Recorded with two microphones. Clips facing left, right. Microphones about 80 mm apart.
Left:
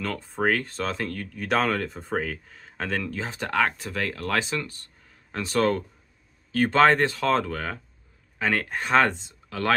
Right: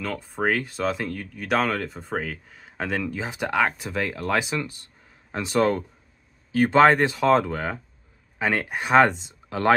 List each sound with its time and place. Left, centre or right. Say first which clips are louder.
0.0 s speech: even; centre; by 9.8 s right